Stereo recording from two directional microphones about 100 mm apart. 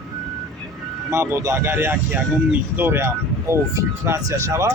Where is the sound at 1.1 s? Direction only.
25° right (ahead or behind).